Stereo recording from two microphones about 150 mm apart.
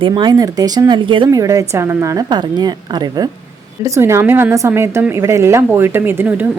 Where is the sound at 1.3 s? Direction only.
25° right (ahead or behind).